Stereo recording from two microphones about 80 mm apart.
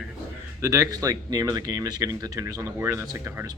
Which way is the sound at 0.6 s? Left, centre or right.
Right.